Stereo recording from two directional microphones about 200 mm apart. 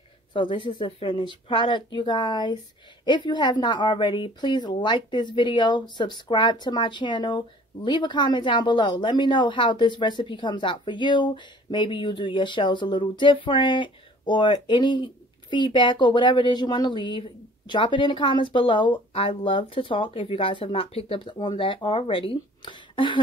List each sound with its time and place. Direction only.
0.3 s speech: 25° left (ahead or behind)